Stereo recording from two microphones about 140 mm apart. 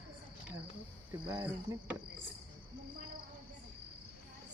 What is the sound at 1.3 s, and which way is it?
Cricket, 30° right (ahead or behind).